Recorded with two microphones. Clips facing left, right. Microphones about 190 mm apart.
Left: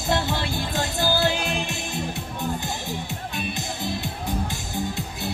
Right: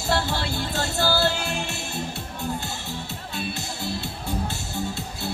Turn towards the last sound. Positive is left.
turn(degrees=15)  # may be behind; listen again after turning